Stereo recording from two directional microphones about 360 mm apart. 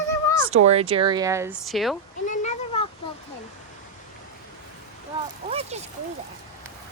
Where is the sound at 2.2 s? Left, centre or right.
Centre.